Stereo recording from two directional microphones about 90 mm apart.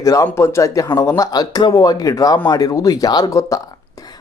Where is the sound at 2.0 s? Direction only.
40° left (ahead or behind).